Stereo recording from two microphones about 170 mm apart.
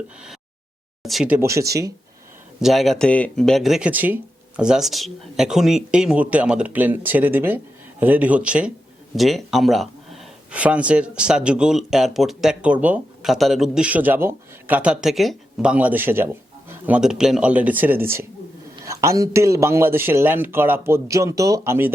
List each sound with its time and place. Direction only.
1.0 s speech: centre (ahead or behind)
1.4 s speech: 20° right (ahead or behind)
2.6 s speech: centre (ahead or behind)